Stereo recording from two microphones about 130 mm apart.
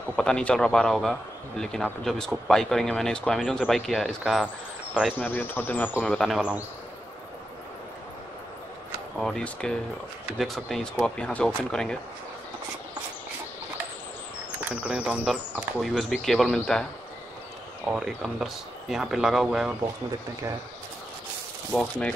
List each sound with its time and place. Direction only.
0.1 s speech: 5° left (ahead or behind)
5.2 s speech: 15° left (ahead or behind)
9.2 s speech: 5° left (ahead or behind)
14.6 s speech: 10° right (ahead or behind)
17.8 s speech: 5° right (ahead or behind)
21.7 s speech: 10° left (ahead or behind)